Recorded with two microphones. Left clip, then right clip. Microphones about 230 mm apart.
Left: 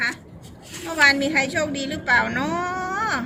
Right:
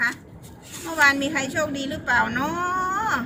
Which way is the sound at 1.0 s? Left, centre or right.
Right.